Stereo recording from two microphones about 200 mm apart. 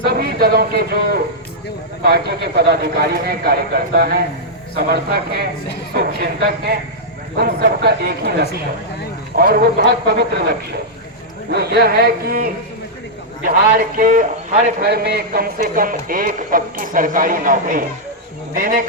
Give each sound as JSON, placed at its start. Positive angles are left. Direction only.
{"t": 0.0, "sound": "a man's voice", "side_deg": -55}
{"t": 11.5, "sound": "a man's voice", "side_deg": -55}